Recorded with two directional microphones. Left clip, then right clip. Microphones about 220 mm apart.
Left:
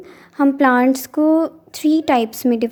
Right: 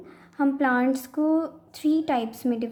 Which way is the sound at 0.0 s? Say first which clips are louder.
Left 8 dB; 40° left (ahead or behind).